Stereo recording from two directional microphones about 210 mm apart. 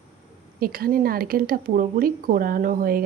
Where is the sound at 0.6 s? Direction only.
45° right (ahead or behind).